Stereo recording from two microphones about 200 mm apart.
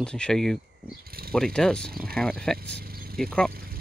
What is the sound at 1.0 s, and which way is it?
Pulleys, 50° right (ahead or behind).